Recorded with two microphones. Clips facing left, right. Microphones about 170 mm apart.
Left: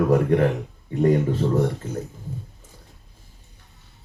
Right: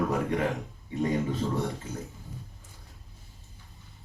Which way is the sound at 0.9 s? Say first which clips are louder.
Left 9 dB; 55° left (ahead or behind).